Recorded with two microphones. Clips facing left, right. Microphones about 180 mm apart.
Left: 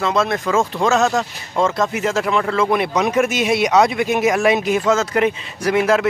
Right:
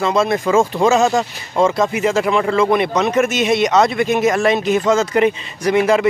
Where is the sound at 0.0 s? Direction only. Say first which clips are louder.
Right 3 dB; centre (ahead or behind).